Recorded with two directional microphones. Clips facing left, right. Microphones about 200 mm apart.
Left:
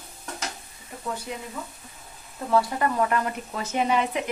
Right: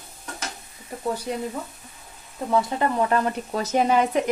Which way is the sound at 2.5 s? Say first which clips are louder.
Right 1 dB; 20° right (ahead or behind).